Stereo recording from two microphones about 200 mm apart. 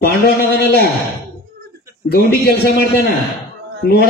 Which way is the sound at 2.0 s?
50° left (ahead or behind).